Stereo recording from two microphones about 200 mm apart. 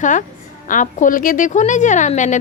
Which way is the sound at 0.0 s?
40° left (ahead or behind).